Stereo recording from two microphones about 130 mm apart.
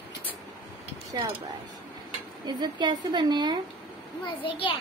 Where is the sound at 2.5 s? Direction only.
35° right (ahead or behind).